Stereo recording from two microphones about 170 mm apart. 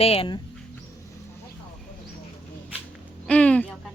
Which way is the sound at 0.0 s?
35° left (ahead or behind).